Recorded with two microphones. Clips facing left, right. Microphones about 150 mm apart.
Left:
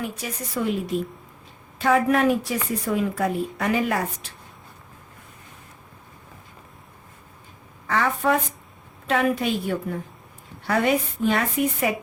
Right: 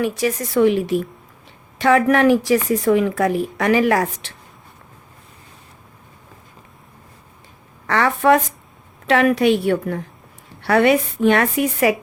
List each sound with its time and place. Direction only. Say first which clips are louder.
0.0 s a woman's voice: right 11 dB; 85° right
7.9 s a woman's voice: right 6 dB; 75° right (ahead or behind)